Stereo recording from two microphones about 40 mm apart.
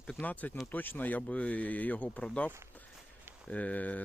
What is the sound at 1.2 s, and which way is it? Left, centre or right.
Speech, left.